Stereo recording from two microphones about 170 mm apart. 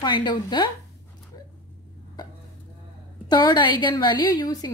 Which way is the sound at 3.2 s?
25° left (ahead or behind).